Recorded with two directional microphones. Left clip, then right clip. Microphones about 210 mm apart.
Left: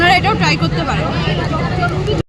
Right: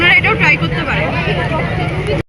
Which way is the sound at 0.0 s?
20° left (ahead or behind).